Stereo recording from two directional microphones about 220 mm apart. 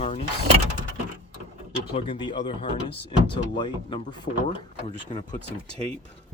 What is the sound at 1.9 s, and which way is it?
Speech, 25° left (ahead or behind).